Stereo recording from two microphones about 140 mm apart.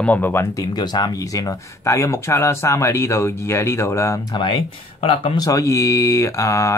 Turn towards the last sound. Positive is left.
turn(degrees=20)  # may be behind; listen again after turning